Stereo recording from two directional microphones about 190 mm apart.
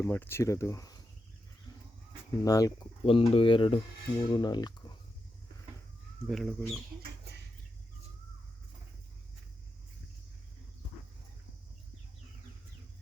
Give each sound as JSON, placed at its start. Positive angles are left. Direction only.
{"t": 0.0, "sound": "speech", "side_deg": 10}
{"t": 2.4, "sound": "speech", "side_deg": 20}
{"t": 3.1, "sound": "speech", "side_deg": 30}
{"t": 6.2, "sound": "speech", "side_deg": 0}